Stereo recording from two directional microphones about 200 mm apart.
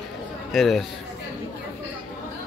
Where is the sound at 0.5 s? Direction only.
Centre (ahead or behind).